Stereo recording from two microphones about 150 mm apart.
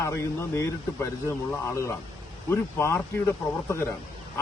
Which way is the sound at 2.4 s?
20° left (ahead or behind).